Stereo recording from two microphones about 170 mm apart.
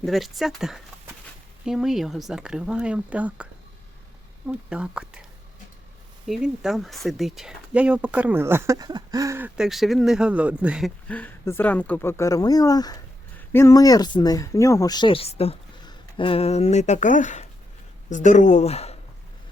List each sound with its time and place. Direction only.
0.0 s speech: centre (ahead or behind)
4.4 s speech: 5° right (ahead or behind)
6.2 s speech: 5° right (ahead or behind)
9.6 s speech: centre (ahead or behind)
11.1 s speech: 10° left (ahead or behind); by 18.9 s 40° left (ahead or behind)